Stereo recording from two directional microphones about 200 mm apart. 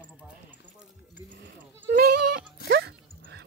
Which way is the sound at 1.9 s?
50° right (ahead or behind).